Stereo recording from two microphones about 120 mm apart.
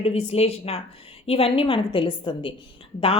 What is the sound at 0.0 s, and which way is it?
A woman's voice, 60° left (ahead or behind).